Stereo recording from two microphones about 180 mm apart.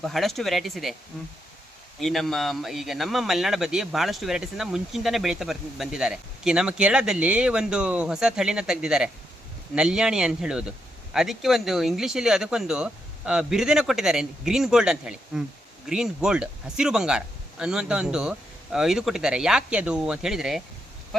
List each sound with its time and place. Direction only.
0.0 s speech: centre (ahead or behind)
2.0 s speech: centre (ahead or behind)